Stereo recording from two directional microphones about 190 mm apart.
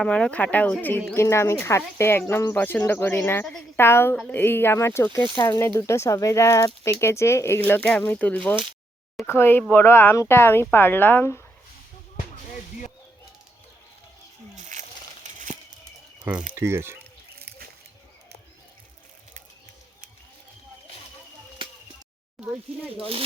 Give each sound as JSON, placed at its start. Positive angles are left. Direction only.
{"t": 0.0, "sound": "speech", "side_deg": 5}
{"t": 14.5, "sound": "a sound", "side_deg": -40}
{"t": 16.5, "sound": "speech", "side_deg": -15}
{"t": 21.6, "sound": "a sound", "side_deg": -25}
{"t": 22.4, "sound": "speech", "side_deg": -5}
{"t": 22.9, "sound": "speech", "side_deg": -30}